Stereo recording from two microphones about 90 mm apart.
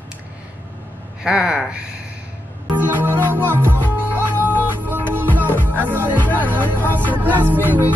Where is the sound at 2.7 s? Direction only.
20° right (ahead or behind).